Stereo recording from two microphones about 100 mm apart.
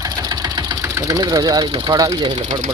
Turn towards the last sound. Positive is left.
turn(degrees=-40)  # may be behind; listen again after turning